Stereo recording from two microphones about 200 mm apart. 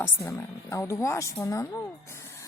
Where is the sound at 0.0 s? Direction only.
10° left (ahead or behind).